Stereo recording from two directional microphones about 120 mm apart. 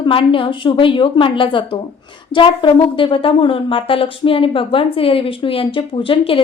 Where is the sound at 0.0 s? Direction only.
45° left (ahead or behind).